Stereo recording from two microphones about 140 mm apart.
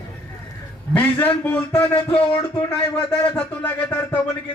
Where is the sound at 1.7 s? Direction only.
15° left (ahead or behind).